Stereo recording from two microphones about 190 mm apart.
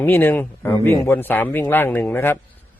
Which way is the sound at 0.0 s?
10° left (ahead or behind).